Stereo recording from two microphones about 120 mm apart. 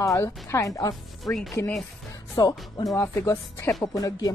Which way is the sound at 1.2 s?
Centre (ahead or behind).